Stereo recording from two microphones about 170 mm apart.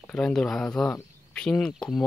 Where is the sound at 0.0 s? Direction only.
5° left (ahead or behind).